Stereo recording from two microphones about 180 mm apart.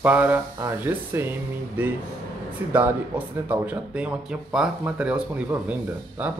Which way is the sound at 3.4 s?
10° right (ahead or behind).